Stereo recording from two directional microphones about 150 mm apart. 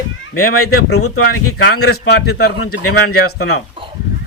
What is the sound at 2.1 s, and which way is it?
A man's voice, 90° left.